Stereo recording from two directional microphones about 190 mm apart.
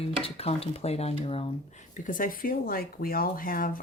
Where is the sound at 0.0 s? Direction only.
30° left (ahead or behind).